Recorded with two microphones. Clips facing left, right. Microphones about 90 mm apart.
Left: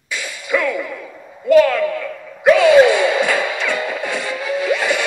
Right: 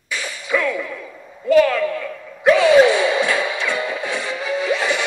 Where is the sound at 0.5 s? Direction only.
15° left (ahead or behind).